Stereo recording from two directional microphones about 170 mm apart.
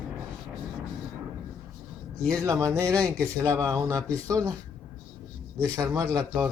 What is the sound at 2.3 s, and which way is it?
Speech, 20° right (ahead or behind).